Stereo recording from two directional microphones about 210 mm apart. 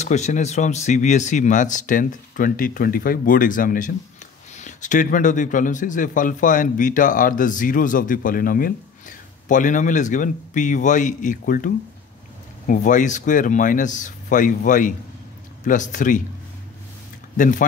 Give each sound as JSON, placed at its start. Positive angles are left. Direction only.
{"t": 0.0, "sound": "speech", "side_deg": 35}
{"t": 17.4, "sound": "speech", "side_deg": 40}